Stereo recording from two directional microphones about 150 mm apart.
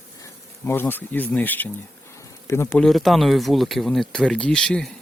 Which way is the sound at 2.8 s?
Centre (ahead or behind).